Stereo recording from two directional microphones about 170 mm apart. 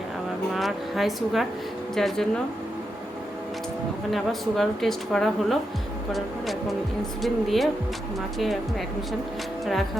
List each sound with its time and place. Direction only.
0.5 s a woman's voice: centre (ahead or behind)
4.1 s a woman's voice: centre (ahead or behind)
9.6 s a woman's voice: centre (ahead or behind)